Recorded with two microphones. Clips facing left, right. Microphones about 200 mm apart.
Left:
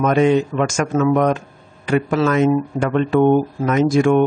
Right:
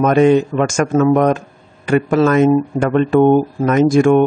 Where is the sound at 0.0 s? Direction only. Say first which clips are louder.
Right 4 dB; 45° right (ahead or behind).